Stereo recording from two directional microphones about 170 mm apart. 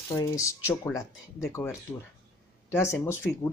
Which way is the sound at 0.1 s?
20° left (ahead or behind).